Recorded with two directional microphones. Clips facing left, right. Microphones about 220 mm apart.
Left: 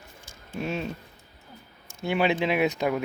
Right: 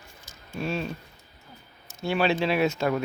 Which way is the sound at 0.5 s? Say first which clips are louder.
Right 1 dB; 20° left (ahead or behind).